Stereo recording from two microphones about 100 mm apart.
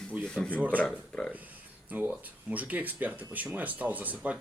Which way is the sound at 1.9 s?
15° right (ahead or behind).